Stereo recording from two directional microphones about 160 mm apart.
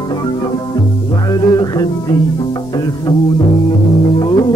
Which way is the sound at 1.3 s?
25° left (ahead or behind).